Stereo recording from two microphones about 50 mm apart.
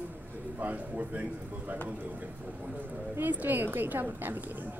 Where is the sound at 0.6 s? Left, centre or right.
Right.